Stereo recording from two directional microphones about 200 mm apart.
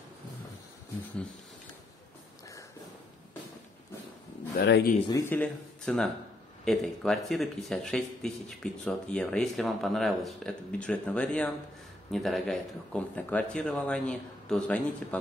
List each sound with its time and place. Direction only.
4.6 s a man's voice: 55° left (ahead or behind)
5.1 s speech: 10° left (ahead or behind)